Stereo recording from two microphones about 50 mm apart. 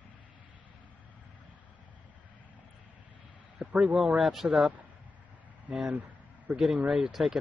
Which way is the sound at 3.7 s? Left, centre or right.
Right.